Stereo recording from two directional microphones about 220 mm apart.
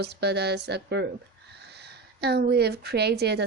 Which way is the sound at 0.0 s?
50° right (ahead or behind).